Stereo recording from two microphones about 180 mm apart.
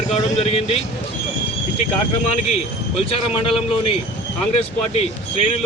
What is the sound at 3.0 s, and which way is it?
Speech, 30° left (ahead or behind).